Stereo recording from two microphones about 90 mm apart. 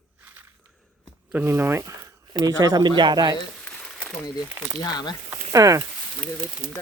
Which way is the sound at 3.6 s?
10° left (ahead or behind).